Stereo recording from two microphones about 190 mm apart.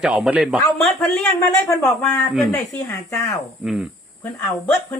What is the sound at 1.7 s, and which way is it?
Speech, 15° left (ahead or behind).